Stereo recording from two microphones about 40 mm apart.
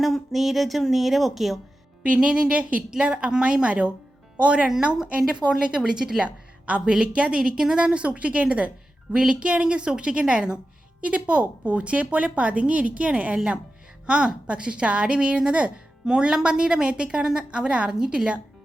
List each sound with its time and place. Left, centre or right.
0.0 s a woman's voice: centre
2.0 s a woman's voice: right
6.2 s a woman's voice: right
11.0 s a woman's voice: right
13.3 s a woman's voice: right